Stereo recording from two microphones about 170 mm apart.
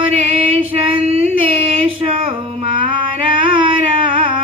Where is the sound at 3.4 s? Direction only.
30° right (ahead or behind).